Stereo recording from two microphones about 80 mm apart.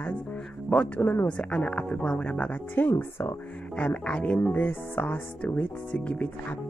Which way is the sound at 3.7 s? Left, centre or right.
Centre.